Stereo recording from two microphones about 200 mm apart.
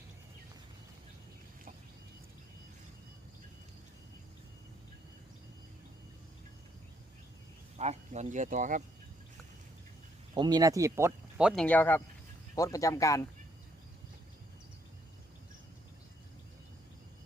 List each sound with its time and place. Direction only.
7.8 s speech: 35° right (ahead or behind)
10.3 s speech: 20° right (ahead or behind); by 13.2 s 15° left (ahead or behind)